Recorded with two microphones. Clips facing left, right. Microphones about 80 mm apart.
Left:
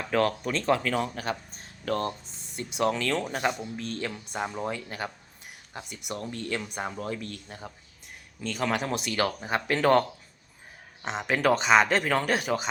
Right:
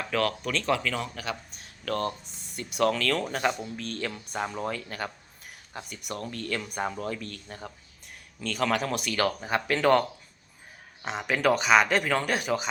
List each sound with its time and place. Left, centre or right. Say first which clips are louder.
0.0 s speech: left 2 dB; left
7.4 s speech: right 1 dB; centre
8.6 s speech: right 1 dB; left
11.0 s speech: even; left